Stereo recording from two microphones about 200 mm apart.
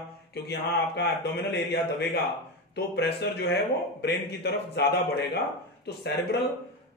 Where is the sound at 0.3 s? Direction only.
55° left (ahead or behind).